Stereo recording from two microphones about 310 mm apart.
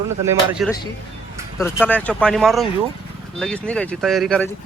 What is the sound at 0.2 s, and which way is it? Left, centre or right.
Speech, centre.